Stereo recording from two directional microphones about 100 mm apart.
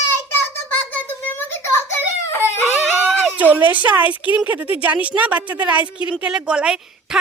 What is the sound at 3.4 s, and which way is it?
A woman's voice, 15° right (ahead or behind).